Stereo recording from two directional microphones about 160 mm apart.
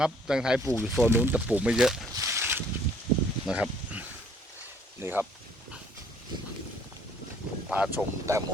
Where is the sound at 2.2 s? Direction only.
15° right (ahead or behind).